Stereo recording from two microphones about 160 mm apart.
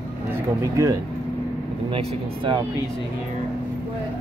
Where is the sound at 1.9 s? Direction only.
35° right (ahead or behind).